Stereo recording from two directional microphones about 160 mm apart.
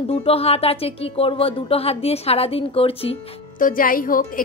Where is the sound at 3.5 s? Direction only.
60° left (ahead or behind).